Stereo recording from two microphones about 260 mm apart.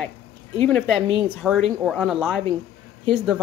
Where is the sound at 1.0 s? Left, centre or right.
Centre.